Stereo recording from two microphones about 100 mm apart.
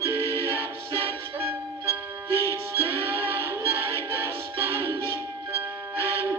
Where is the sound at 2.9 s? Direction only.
25° right (ahead or behind).